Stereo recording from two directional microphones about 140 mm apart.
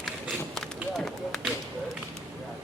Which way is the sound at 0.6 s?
Centre (ahead or behind).